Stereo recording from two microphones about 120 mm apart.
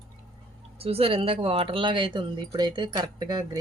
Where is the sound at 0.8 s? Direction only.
55° right (ahead or behind); by 3.6 s 35° right (ahead or behind).